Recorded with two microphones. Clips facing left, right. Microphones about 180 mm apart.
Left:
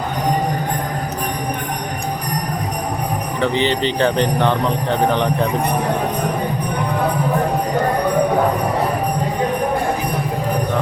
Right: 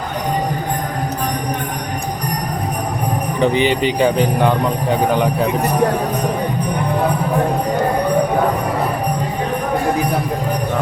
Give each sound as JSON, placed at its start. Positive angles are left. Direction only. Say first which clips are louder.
{"t": 3.4, "sound": "speech", "louder": "right 3 dB", "side_deg": -15}